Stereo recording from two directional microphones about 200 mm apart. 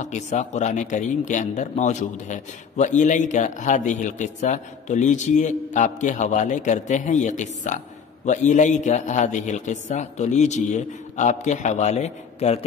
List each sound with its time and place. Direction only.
0.0 s speech: 35° left (ahead or behind)